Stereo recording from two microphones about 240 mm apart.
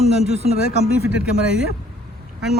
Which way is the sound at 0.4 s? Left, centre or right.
Left.